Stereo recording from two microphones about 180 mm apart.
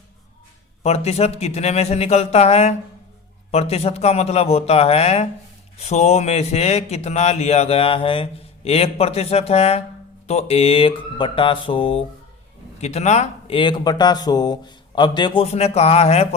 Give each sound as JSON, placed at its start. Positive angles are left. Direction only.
{"t": 0.8, "sound": "speech", "side_deg": 35}